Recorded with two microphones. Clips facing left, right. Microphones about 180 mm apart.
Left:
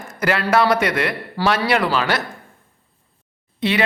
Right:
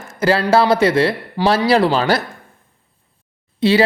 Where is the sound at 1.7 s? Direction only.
30° right (ahead or behind).